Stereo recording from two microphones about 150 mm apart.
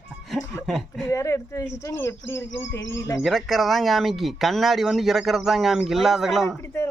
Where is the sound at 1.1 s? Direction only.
20° left (ahead or behind).